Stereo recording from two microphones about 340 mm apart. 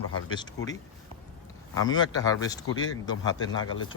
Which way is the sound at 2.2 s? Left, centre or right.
Centre.